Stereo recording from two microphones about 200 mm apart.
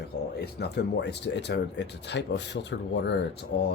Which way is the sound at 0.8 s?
60° left (ahead or behind).